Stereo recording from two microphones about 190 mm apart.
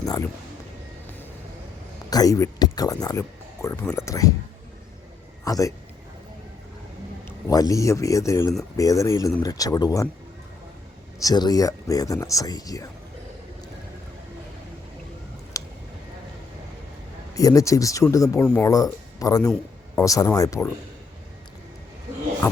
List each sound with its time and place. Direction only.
0.0 s speech: 20° left (ahead or behind)
2.0 s speech: 20° left (ahead or behind)
5.5 s speech: 20° left (ahead or behind)
7.3 s speech: 20° left (ahead or behind)
11.2 s speech: 20° left (ahead or behind)
15.6 s a sound: 15° left (ahead or behind)
17.3 s speech: 15° left (ahead or behind)